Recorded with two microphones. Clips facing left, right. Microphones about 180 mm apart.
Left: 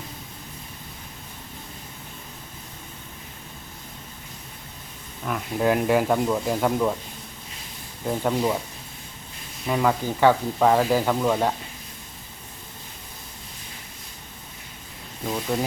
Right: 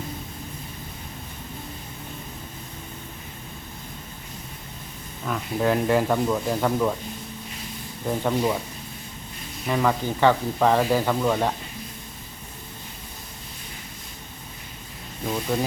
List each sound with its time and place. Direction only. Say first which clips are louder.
5.2 s speech: left 1 dB; 5° left (ahead or behind)
8.0 s speech: even; 5° left (ahead or behind)
9.6 s speech: even; 5° left (ahead or behind)
15.3 s speech: even; centre (ahead or behind)